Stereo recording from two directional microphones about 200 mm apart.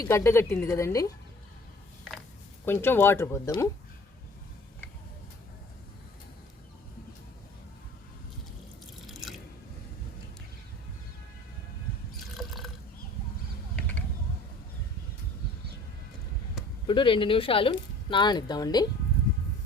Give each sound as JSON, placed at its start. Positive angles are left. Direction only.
{"t": 0.0, "sound": "a woman's voice", "side_deg": 15}
{"t": 2.6, "sound": "a woman's voice", "side_deg": 10}
{"t": 9.2, "sound": "chewing", "side_deg": 0}
{"t": 12.4, "sound": "a sound", "side_deg": 0}
{"t": 16.8, "sound": "speech", "side_deg": 25}